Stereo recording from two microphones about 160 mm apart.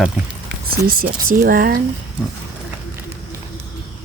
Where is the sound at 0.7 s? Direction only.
65° right (ahead or behind).